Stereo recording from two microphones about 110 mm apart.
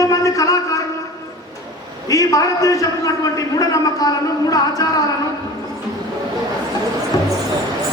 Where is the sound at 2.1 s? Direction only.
35° left (ahead or behind).